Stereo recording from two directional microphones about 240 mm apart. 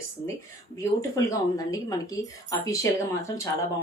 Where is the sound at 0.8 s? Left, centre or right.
Centre.